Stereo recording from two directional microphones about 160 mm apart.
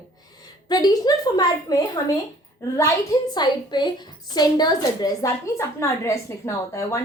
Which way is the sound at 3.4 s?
25° left (ahead or behind).